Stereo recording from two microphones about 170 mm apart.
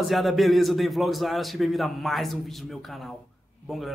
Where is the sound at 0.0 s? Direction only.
Centre (ahead or behind).